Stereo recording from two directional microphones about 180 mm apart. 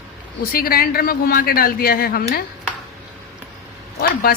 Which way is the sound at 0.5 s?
55° left (ahead or behind).